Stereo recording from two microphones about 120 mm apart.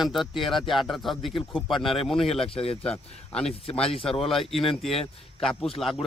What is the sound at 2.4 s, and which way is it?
Speech, 55° left (ahead or behind).